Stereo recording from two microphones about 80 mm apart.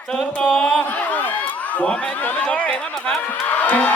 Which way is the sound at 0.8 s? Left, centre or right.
Left.